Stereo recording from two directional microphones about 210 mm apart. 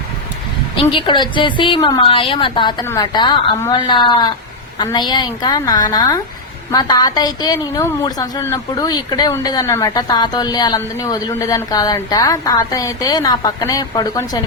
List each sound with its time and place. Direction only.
0.8 s a woman's voice: 25° left (ahead or behind)